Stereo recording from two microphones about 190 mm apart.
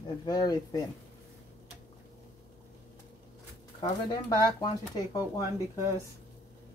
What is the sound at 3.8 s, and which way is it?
Speech, 25° left (ahead or behind).